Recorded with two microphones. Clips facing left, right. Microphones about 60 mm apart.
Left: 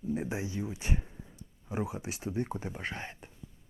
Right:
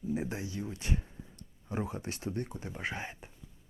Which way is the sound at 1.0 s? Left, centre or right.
Centre.